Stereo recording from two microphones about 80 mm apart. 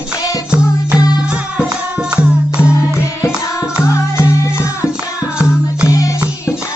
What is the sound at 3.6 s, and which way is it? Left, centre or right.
Music, left.